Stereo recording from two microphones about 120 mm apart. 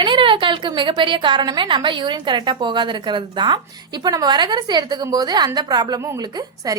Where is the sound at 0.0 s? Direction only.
45° right (ahead or behind).